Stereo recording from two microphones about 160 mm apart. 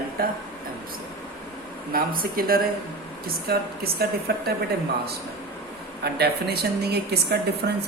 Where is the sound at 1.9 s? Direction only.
65° right (ahead or behind).